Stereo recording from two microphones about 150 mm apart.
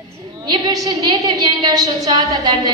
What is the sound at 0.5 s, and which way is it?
A woman's voice, 25° right (ahead or behind).